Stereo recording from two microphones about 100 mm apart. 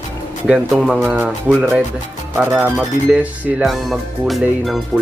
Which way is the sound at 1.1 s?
20° right (ahead or behind).